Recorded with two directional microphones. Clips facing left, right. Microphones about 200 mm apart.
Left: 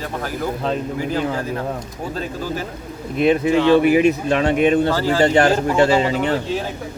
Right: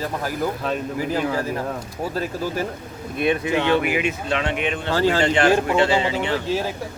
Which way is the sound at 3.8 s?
35° left (ahead or behind).